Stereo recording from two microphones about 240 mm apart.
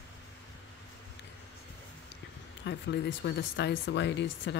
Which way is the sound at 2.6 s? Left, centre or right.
Left.